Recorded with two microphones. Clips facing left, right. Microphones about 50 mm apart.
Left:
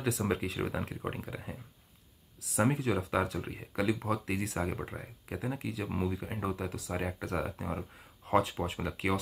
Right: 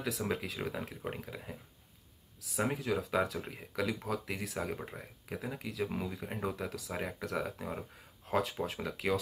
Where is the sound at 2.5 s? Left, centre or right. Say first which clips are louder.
Left 4 dB; centre.